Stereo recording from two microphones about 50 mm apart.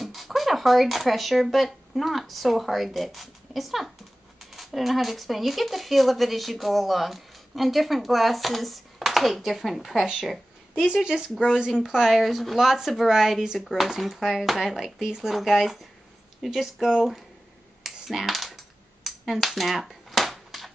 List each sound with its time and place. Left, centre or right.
0.0 s speech: centre
10.7 s speech: centre
17.8 s computer keyboard: centre
19.1 s a sound: centre